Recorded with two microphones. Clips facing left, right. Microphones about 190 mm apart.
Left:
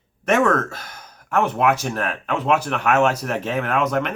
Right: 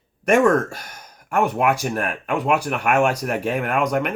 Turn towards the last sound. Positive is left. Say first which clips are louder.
# even
turn(degrees=-10)  # may be behind; listen again after turning